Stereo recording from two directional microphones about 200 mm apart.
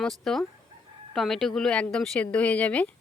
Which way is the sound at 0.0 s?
Centre (ahead or behind).